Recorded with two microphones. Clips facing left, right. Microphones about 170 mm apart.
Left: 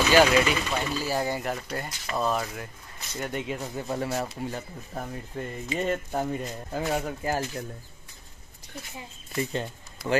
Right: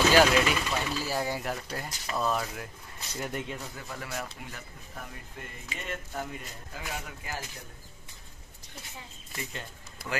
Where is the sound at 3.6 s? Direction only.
30° left (ahead or behind).